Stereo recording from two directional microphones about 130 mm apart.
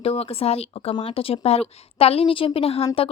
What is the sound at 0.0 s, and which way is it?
A woman's voice, 50° left (ahead or behind).